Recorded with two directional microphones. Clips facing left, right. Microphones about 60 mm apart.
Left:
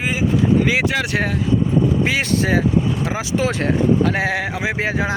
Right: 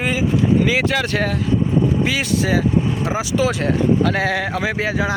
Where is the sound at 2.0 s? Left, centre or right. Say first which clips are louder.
Left 1 dB; left.